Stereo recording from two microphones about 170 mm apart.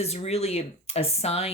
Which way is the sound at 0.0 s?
40° left (ahead or behind).